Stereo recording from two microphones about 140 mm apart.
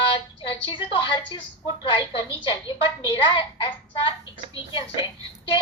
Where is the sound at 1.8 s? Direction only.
35° left (ahead or behind).